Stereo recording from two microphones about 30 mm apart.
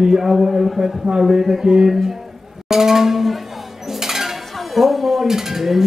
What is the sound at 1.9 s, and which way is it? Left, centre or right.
Speech, centre.